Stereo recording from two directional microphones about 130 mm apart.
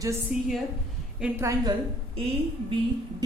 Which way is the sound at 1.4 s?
25° right (ahead or behind).